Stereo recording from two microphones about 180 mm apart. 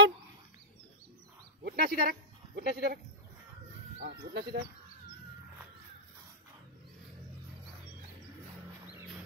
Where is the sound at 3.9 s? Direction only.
65° right (ahead or behind).